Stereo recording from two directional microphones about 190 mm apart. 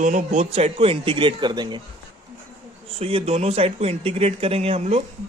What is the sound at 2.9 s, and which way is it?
Speech, 30° right (ahead or behind).